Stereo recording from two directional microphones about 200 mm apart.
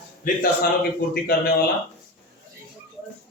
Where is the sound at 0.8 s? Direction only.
50° left (ahead or behind).